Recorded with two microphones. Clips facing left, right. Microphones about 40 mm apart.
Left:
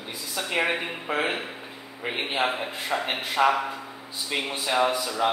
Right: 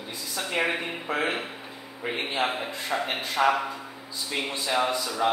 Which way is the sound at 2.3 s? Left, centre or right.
Centre.